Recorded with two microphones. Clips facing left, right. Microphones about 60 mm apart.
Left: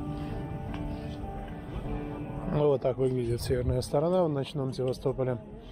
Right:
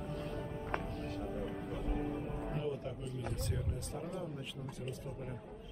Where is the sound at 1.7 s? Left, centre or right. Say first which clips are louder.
Left 3 dB; left.